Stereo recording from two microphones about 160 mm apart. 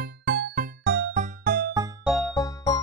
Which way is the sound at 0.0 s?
90° right.